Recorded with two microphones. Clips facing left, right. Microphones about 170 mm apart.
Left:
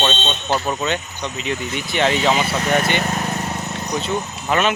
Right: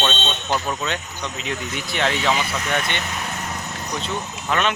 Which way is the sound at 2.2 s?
30° left (ahead or behind).